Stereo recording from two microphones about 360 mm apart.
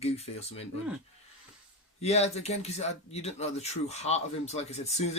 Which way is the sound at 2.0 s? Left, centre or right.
Centre.